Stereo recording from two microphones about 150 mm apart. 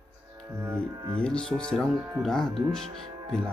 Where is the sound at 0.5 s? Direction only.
15° right (ahead or behind).